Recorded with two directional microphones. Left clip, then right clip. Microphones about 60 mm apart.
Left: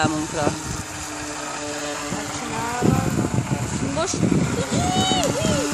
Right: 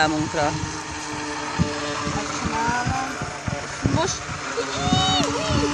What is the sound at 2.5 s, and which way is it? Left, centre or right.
Vehicle, centre.